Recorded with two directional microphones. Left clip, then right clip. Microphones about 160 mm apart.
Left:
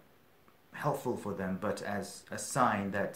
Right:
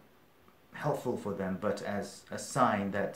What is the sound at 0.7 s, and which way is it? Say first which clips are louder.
Speech: right 1 dB; 35° left (ahead or behind).